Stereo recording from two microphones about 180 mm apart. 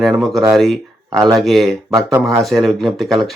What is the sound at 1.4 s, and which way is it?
Speech, centre (ahead or behind).